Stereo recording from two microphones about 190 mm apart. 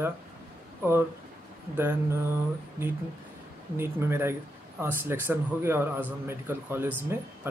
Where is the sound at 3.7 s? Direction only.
10° right (ahead or behind).